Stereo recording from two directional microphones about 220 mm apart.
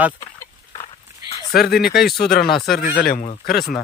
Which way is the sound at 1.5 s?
45° left (ahead or behind).